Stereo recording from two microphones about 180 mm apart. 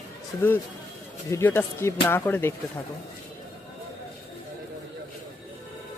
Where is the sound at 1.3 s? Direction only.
10° left (ahead or behind).